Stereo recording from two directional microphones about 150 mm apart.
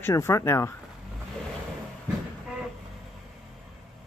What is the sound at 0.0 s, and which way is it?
Speech, 20° left (ahead or behind).